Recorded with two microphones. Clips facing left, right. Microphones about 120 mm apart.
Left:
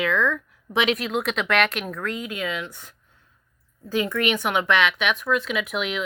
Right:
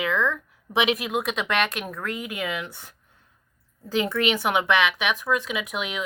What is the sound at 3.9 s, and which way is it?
Speech, 20° right (ahead or behind).